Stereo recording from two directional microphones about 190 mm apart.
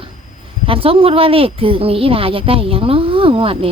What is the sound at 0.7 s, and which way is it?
Speech, 30° right (ahead or behind).